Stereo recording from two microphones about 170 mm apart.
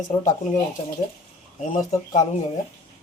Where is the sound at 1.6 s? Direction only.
45° left (ahead or behind).